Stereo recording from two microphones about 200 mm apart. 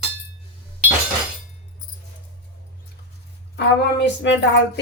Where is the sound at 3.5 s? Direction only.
60° left (ahead or behind).